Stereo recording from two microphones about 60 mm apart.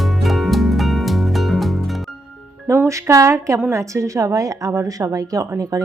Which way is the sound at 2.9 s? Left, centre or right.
Right.